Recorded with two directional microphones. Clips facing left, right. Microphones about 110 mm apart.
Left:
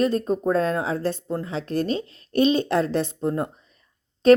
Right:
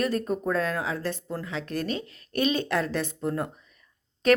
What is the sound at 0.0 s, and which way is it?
Speech, 30° left (ahead or behind).